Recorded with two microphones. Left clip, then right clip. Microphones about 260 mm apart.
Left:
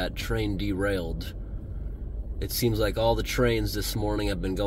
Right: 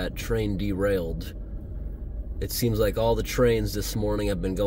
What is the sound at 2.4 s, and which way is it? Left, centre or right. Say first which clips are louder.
Speech: right 2 dB; centre.